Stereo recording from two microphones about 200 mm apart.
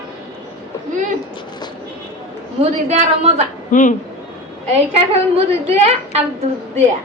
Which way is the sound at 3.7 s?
40° left (ahead or behind).